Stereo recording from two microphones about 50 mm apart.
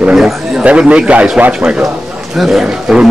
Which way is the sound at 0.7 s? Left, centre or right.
Right.